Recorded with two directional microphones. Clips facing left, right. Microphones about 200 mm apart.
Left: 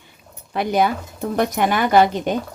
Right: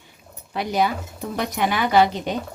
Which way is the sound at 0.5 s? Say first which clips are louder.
Left 3 dB; 55° left (ahead or behind).